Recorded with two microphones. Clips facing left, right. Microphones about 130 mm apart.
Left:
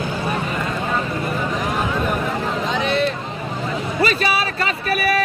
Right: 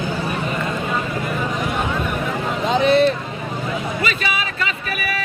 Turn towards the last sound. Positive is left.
turn(degrees=40)  # may be behind; listen again after turning